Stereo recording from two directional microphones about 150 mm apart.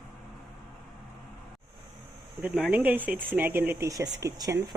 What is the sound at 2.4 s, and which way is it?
Speech, 10° right (ahead or behind).